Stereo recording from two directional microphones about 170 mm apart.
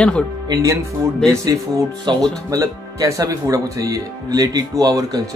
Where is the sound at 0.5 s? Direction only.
20° right (ahead or behind).